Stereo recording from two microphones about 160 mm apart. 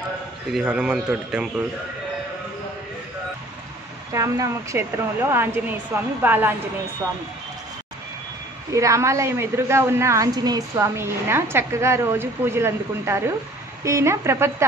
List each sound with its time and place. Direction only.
0.5 s a man's voice: 5° right (ahead or behind)
4.1 s a woman's voice: 20° right (ahead or behind)
8.7 s a woman's voice: 20° right (ahead or behind)